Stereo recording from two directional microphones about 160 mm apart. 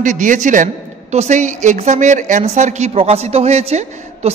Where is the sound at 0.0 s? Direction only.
55° right (ahead or behind).